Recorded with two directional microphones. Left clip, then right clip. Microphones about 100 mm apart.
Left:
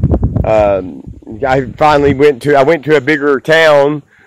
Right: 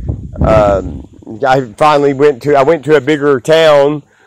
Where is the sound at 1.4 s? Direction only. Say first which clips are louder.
Right 1 dB; 25° left (ahead or behind).